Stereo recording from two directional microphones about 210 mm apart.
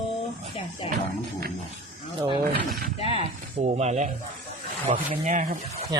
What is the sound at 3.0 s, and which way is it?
Speech, 25° left (ahead or behind).